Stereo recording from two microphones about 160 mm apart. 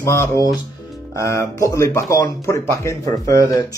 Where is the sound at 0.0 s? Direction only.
15° left (ahead or behind).